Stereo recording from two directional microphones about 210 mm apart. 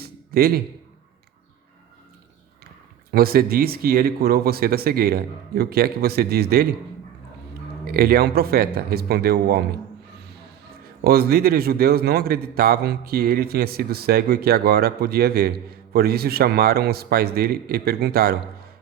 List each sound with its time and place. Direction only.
0.0 s a sound: 45° right (ahead or behind)
3.1 s a man's voice: 45° right (ahead or behind)
7.9 s a man's voice: 45° right (ahead or behind)
11.0 s a man's voice: 45° right (ahead or behind)